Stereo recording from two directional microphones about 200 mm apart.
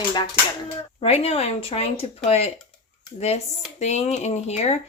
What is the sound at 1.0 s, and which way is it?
Speech, 30° left (ahead or behind).